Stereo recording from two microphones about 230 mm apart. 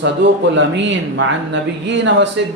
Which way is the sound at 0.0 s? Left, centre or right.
Right.